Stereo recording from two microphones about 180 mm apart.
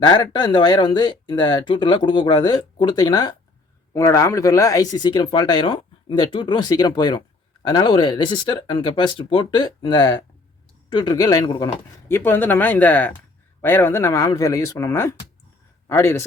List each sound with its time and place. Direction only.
0.0 s speech: 25° left (ahead or behind)